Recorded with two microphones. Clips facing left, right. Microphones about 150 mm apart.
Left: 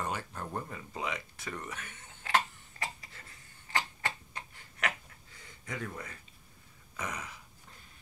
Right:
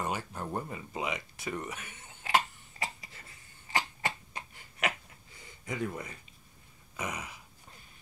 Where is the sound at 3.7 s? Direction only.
15° right (ahead or behind).